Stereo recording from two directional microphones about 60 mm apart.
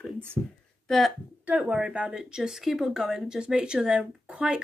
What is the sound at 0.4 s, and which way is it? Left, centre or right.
Speech, right.